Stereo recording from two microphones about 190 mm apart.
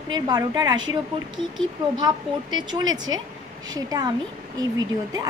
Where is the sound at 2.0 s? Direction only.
20° right (ahead or behind).